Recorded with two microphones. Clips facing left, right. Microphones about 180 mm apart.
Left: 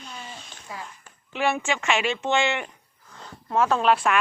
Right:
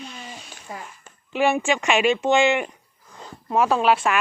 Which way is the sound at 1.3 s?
15° right (ahead or behind).